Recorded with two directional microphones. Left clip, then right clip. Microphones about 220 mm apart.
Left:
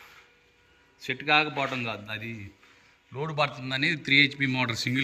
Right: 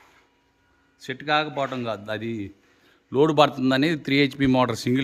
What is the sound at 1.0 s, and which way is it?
A man's voice, 20° right (ahead or behind).